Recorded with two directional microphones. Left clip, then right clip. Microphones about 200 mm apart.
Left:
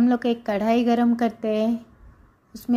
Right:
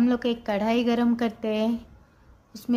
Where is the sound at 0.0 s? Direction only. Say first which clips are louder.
Left 3 dB; 10° left (ahead or behind).